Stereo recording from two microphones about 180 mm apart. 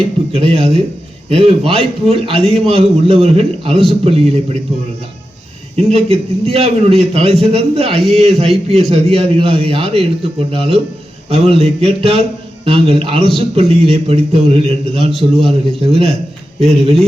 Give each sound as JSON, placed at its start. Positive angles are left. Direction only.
{"t": 0.3, "sound": "a man's voice", "side_deg": -35}
{"t": 5.7, "sound": "a man's voice", "side_deg": -35}